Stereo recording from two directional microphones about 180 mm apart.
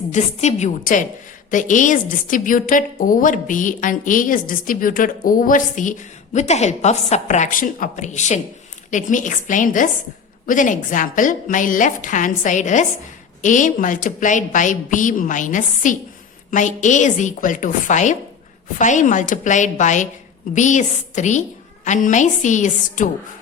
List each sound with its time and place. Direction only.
0.1 s a woman's voice: 40° left (ahead or behind)